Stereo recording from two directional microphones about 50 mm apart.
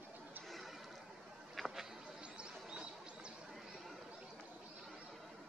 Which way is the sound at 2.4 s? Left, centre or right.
Centre.